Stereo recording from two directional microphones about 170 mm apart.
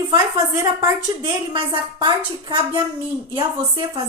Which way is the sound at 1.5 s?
30° right (ahead or behind).